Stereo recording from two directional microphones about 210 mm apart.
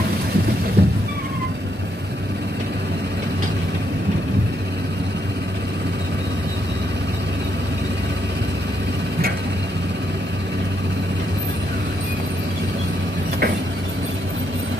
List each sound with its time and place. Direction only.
0.8 s cat: 50° right (ahead or behind)